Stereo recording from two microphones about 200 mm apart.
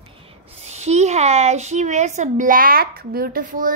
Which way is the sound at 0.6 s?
35° right (ahead or behind).